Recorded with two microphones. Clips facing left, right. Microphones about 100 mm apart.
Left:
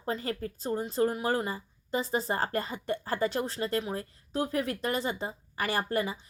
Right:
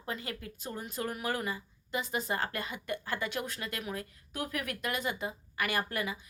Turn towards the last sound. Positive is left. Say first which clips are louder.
# left 4 dB
turn(degrees=30)  # may be behind; listen again after turning